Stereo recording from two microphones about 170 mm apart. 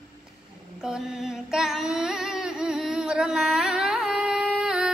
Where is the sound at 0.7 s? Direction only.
5° right (ahead or behind).